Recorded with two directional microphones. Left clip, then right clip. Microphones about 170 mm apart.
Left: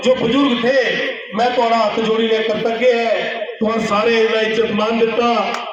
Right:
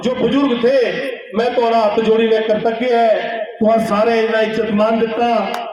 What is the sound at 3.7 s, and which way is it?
A man's voice, 30° left (ahead or behind).